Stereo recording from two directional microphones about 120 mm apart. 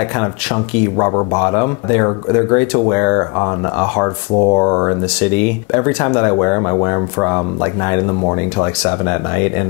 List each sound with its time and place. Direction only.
0.9 s speech: 25° left (ahead or behind)
5.2 s speech: 10° left (ahead or behind)